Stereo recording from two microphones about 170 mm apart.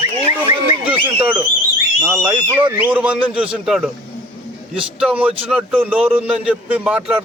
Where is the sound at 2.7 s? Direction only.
10° right (ahead or behind).